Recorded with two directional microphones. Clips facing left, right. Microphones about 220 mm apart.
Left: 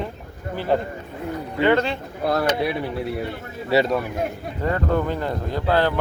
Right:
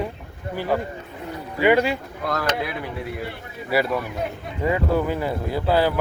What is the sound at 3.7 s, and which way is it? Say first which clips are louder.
Speech: left 3 dB; 25° left (ahead or behind).